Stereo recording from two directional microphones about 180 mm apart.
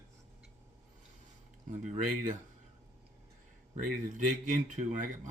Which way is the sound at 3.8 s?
45° right (ahead or behind).